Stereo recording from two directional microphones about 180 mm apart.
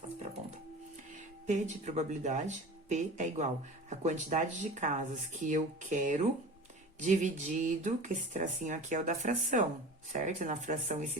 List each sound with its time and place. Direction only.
1.1 s speech: 40° right (ahead or behind)